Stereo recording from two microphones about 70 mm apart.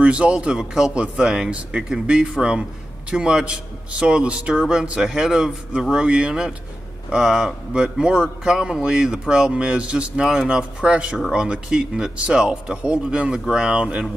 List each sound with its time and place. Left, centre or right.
0.0 s speech: centre